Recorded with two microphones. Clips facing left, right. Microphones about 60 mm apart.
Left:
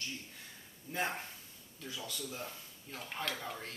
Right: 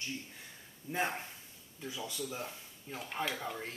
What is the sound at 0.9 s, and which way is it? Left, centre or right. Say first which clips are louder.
Speech: right 2 dB; centre.